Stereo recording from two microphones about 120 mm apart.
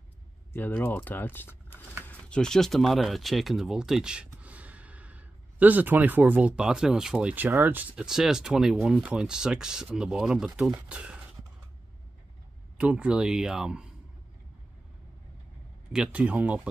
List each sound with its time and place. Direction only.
0.5 s speech: 15° left (ahead or behind); by 11.1 s 10° right (ahead or behind)
12.7 s speech: 10° right (ahead or behind)
15.9 s speech: 10° right (ahead or behind)